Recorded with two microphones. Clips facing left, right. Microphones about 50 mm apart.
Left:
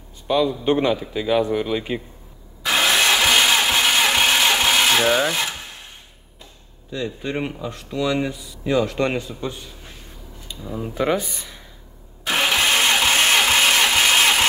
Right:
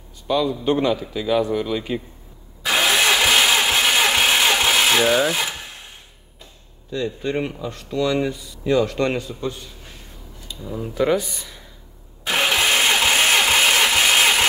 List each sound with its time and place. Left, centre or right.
0.3 s a man's voice: left
2.6 s engine starting: centre
6.9 s a man's voice: centre; by 11.6 s left
12.3 s engine: centre